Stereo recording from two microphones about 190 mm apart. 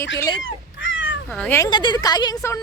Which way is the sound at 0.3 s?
80° left.